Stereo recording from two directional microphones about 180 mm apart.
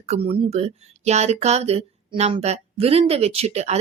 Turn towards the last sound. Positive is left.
turn(degrees=-35)  # may be behind; listen again after turning